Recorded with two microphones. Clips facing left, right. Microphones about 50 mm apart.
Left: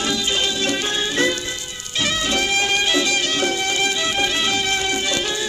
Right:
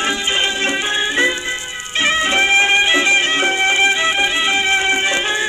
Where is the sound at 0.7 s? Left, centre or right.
Right.